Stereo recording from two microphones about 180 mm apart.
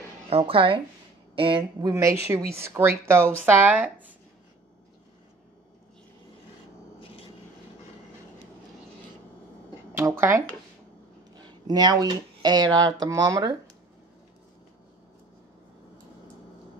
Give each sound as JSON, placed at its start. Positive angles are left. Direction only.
{"t": 0.3, "sound": "a woman's voice", "side_deg": -30}
{"t": 9.9, "sound": "speech", "side_deg": -15}
{"t": 11.4, "sound": "speech", "side_deg": -25}